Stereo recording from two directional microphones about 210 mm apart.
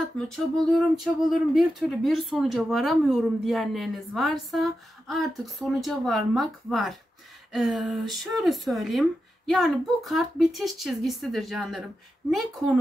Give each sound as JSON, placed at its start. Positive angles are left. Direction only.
{"t": 0.3, "sound": "speech", "side_deg": 0}